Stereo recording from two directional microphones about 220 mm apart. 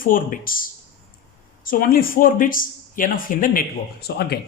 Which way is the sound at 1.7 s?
40° left (ahead or behind).